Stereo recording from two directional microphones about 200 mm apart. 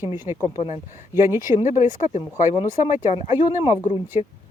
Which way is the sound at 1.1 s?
10° right (ahead or behind).